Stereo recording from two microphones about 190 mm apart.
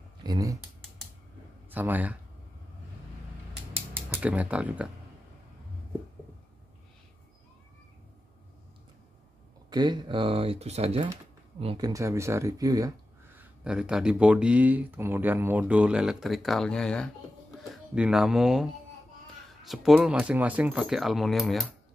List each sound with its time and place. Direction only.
0.2 s speech: 20° right (ahead or behind)
1.7 s speech: 10° right (ahead or behind)
4.1 s speech: 5° right (ahead or behind)
9.7 s speech: 20° right (ahead or behind)
11.6 s speech: 20° right (ahead or behind); by 21.6 s centre (ahead or behind)